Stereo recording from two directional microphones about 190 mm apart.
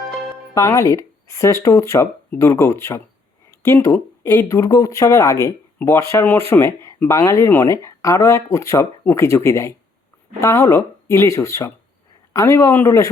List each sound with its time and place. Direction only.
0.5 s speech: 15° left (ahead or behind)